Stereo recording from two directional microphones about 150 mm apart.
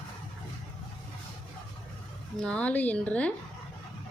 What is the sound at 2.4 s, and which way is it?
Speech, 5° left (ahead or behind).